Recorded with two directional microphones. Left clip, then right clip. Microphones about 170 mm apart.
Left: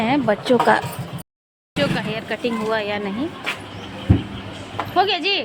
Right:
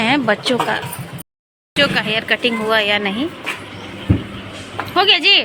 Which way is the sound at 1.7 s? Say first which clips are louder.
Right 7 dB; centre (ahead or behind).